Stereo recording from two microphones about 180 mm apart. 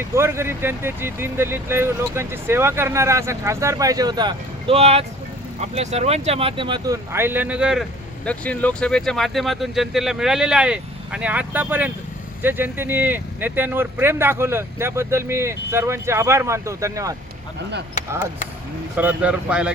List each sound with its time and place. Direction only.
0.0 s speech: 15° right (ahead or behind)
8.2 s speech: 5° left (ahead or behind); by 17.2 s 20° right (ahead or behind)
18.9 s speech: 10° right (ahead or behind)